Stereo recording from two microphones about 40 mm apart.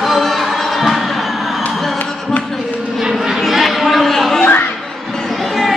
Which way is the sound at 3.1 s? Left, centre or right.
Centre.